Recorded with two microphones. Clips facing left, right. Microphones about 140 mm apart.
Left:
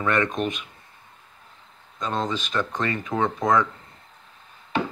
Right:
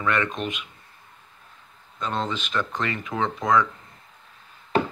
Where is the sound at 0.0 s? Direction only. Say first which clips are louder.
Left 2 dB; 35° left (ahead or behind).